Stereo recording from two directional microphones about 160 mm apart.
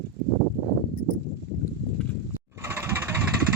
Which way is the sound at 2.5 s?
15° right (ahead or behind).